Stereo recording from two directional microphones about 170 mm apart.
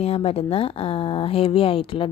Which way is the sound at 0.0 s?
35° left (ahead or behind).